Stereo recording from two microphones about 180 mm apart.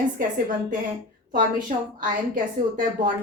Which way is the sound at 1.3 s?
45° right (ahead or behind).